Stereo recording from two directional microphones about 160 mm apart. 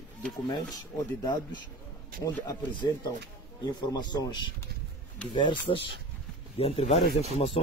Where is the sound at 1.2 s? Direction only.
25° left (ahead or behind).